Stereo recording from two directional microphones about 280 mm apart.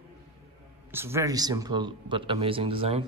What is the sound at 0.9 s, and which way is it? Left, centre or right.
A man's voice, centre.